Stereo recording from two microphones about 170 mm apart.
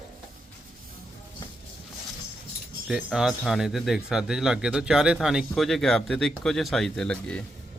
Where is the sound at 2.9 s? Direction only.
5° right (ahead or behind).